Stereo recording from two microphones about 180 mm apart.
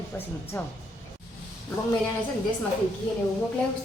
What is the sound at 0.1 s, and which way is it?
Speech, 10° left (ahead or behind).